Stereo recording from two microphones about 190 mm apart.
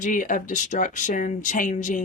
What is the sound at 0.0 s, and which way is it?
Speech, 45° left (ahead or behind).